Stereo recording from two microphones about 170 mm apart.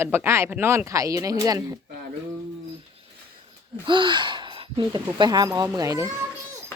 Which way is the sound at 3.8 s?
30° right (ahead or behind).